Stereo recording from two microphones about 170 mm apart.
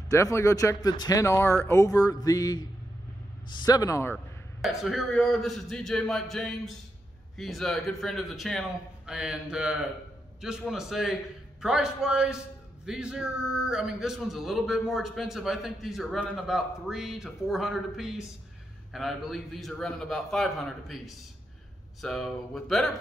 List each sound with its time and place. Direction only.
0.1 s speech: 15° left (ahead or behind)
3.6 s speech: 20° left (ahead or behind)
4.6 s a man's voice: centre (ahead or behind)